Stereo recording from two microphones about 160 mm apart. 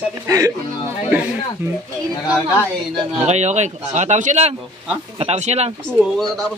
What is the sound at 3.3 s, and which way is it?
Speech, 45° right (ahead or behind).